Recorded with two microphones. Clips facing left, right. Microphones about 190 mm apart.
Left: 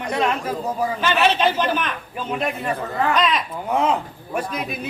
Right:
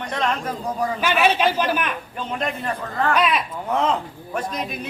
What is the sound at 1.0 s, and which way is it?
Speech, 10° right (ahead or behind).